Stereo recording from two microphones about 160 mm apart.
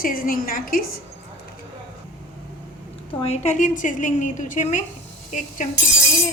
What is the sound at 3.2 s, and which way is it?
A woman's voice, 45° left (ahead or behind).